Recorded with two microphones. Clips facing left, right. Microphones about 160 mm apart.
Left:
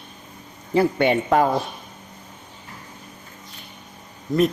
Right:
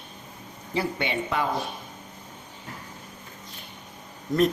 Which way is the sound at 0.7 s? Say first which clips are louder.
Left 10 dB; 50° left (ahead or behind).